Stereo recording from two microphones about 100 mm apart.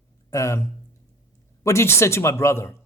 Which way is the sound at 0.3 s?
30° left (ahead or behind).